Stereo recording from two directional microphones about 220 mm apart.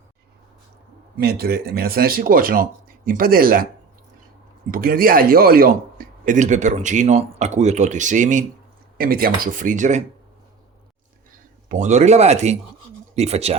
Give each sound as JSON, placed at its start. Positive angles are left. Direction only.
{"t": 1.2, "sound": "speech", "side_deg": -45}
{"t": 4.7, "sound": "speech", "side_deg": -40}
{"t": 11.7, "sound": "speech", "side_deg": -30}